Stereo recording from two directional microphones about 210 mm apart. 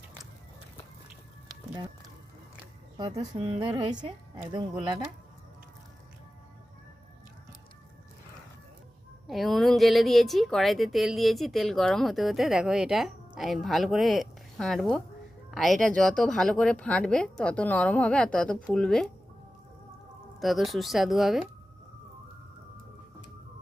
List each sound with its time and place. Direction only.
3.2 s a woman's voice: 25° right (ahead or behind)
9.2 s a woman's voice: centre (ahead or behind)
20.4 s a woman's voice: centre (ahead or behind)